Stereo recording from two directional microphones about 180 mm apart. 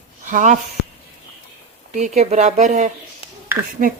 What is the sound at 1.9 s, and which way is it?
Speech, 40° right (ahead or behind).